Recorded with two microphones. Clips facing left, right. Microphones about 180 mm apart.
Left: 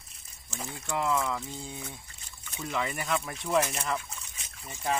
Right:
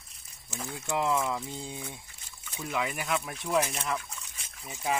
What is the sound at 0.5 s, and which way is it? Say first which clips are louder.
Speech: right 1 dB; centre (ahead or behind).